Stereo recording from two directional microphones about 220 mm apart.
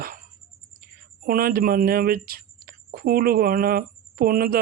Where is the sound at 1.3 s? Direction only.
40° right (ahead or behind).